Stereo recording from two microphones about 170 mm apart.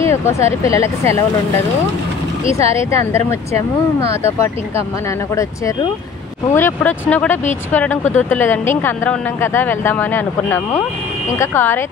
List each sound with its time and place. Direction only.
0.0 s speech: 15° left (ahead or behind)
2.7 s speech: 15° left (ahead or behind)